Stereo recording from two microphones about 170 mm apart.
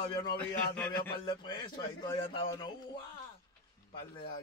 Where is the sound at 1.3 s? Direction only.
25° left (ahead or behind).